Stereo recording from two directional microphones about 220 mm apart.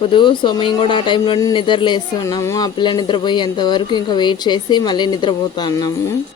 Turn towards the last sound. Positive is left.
turn(degrees=20)  # may be behind; listen again after turning